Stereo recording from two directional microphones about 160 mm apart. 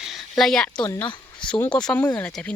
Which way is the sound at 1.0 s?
30° left (ahead or behind).